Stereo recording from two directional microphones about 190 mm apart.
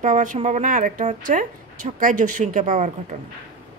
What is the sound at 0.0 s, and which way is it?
A woman's voice, 40° right (ahead or behind).